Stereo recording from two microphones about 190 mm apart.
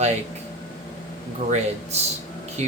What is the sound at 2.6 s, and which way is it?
Speech, 35° right (ahead or behind).